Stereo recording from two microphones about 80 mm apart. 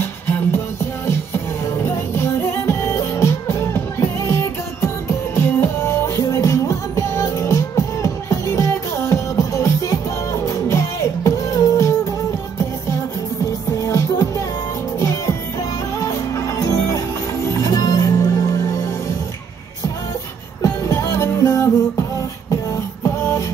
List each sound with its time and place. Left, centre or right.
1.0 s music: left
13.7 s music: left
20.6 s music: left
23.0 s music: left